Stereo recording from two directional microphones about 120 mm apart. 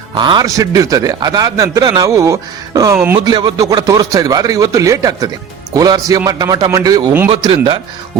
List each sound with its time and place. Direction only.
0.1 s a man's voice: 40° right (ahead or behind); by 3.2 s 25° right (ahead or behind)
3.2 s speech: 40° right (ahead or behind)
7.3 s speech: 50° right (ahead or behind)